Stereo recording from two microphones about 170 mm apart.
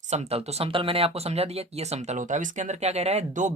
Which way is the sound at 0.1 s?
40° right (ahead or behind).